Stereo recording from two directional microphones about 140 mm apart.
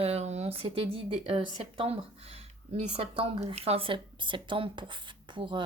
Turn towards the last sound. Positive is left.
turn(degrees=-35)  # may be behind; listen again after turning